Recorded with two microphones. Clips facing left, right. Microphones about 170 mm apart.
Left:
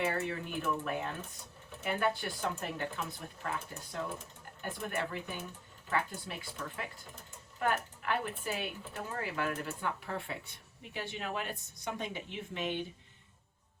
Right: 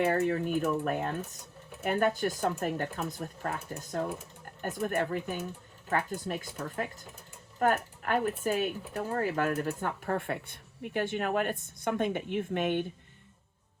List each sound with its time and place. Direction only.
0.0 s speech: 45° right (ahead or behind)